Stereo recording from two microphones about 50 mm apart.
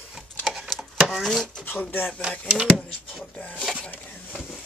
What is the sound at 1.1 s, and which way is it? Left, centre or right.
Chopping, centre.